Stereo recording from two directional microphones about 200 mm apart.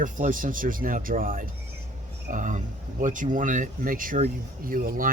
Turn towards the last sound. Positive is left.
turn(degrees=-45)  # may be behind; listen again after turning